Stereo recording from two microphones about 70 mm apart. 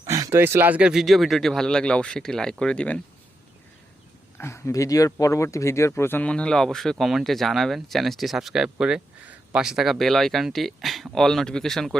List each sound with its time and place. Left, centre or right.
0.1 s a sound: right
0.3 s speech: right
0.7 s speech: centre
0.9 s speech: centre
4.4 s speech: left
6.2 s speech: centre